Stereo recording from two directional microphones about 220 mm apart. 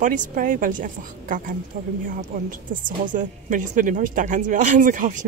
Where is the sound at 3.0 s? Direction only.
35° right (ahead or behind).